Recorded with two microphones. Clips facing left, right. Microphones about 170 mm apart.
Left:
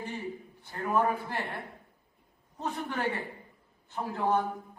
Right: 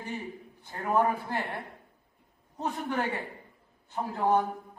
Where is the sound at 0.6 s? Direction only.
15° right (ahead or behind).